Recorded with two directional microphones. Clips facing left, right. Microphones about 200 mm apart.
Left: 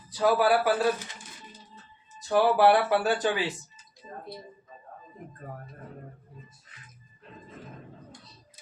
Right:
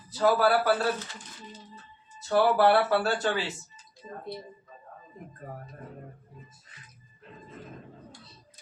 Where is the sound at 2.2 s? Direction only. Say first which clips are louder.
Left 1 dB; 15° left (ahead or behind).